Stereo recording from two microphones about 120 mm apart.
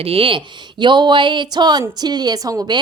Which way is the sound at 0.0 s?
50° right (ahead or behind).